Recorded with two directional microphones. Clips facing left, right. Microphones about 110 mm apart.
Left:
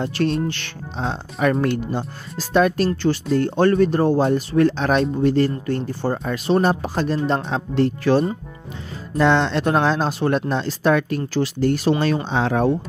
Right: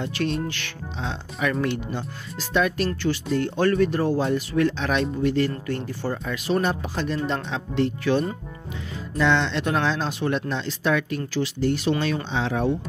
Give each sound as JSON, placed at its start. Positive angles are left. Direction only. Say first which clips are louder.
{"t": 0.0, "sound": "speech", "louder": "left 5 dB", "side_deg": 35}